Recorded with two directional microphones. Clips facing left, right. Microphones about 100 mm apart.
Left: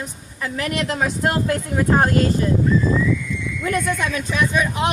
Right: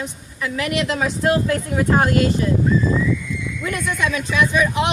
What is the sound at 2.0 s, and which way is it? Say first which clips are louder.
Speech: even; 40° left (ahead or behind).